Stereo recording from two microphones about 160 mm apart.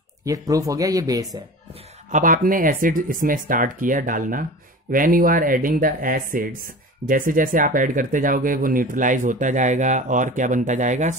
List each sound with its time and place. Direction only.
0.2 s speech: 20° right (ahead or behind)
2.0 s speech: 55° right (ahead or behind)